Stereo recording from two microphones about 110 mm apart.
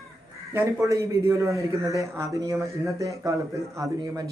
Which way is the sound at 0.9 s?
30° right (ahead or behind).